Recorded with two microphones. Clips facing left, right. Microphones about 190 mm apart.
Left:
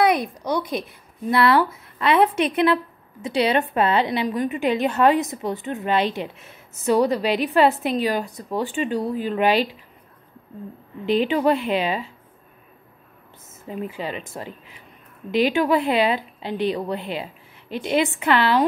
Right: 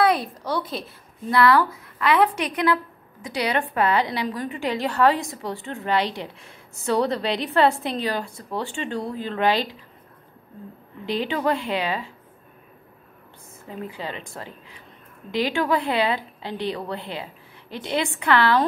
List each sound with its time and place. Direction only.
0.0 s a woman's voice: 15° left (ahead or behind)
11.1 s a woman's voice: 15° left (ahead or behind)
13.9 s a woman's voice: 20° left (ahead or behind)